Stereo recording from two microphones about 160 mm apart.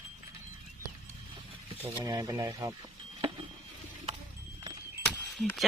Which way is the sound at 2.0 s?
20° right (ahead or behind).